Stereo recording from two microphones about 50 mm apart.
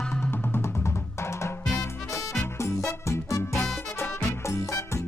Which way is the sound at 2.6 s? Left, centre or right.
Left.